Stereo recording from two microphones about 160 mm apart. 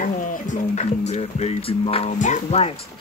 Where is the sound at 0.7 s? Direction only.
45° left (ahead or behind).